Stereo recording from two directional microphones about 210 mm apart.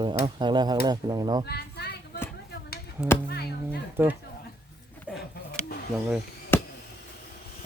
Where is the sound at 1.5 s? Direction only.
50° left (ahead or behind).